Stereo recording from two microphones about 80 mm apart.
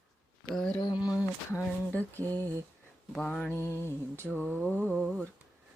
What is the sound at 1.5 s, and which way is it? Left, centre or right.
Mantra, left.